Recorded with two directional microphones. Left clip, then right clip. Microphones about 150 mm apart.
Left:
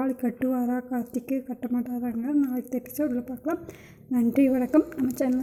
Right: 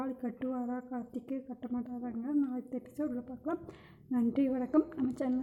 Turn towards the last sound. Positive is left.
turn(degrees=10)  # may be behind; listen again after turning